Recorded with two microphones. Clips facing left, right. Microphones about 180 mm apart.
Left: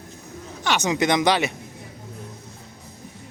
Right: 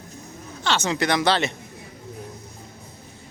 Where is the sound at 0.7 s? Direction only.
15° left (ahead or behind).